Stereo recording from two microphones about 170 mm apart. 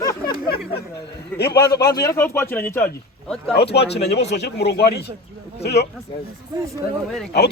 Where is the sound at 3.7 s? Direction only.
85° left.